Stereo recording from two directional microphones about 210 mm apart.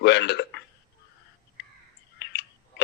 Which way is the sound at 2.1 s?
55° left (ahead or behind).